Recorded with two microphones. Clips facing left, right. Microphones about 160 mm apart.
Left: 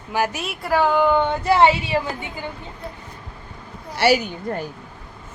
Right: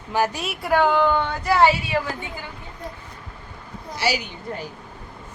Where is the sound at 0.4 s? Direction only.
Centre (ahead or behind).